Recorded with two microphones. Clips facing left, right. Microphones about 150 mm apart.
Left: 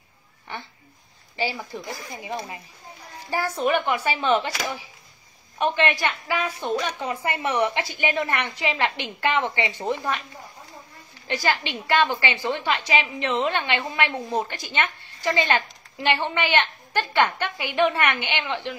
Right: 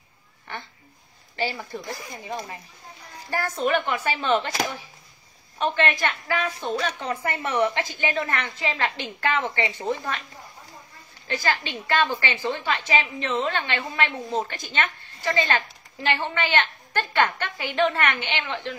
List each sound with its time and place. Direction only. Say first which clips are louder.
1.3 s a woman's voice: even; 15° left (ahead or behind)
5.6 s a woman's voice: left 1 dB; 15° left (ahead or behind)
11.2 s a woman's voice: left 2 dB; 15° left (ahead or behind)